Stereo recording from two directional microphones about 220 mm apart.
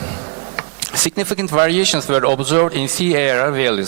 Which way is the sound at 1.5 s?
20° right (ahead or behind).